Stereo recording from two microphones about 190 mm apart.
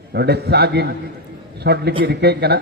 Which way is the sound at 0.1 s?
60° right (ahead or behind).